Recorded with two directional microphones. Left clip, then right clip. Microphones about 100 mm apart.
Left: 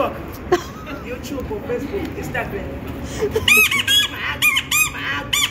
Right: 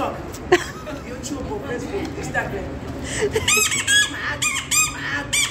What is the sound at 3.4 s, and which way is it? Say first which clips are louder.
Squeak: left 9 dB; 25° right (ahead or behind).